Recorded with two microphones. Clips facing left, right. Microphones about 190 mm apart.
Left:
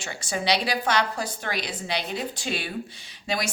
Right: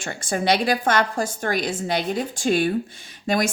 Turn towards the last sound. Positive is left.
turn(degrees=-50)  # may be behind; listen again after turning